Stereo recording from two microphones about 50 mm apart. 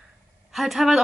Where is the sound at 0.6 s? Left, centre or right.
Centre.